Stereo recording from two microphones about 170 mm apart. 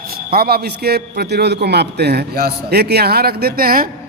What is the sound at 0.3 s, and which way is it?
A man's voice, 65° right (ahead or behind).